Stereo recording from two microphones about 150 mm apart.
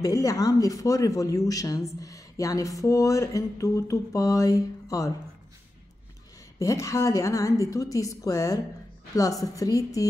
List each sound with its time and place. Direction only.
0.0 s speech: 20° left (ahead or behind)
6.6 s speech: 20° left (ahead or behind)